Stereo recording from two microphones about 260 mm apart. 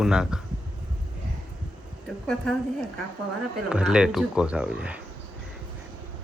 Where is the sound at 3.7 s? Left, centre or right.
Centre.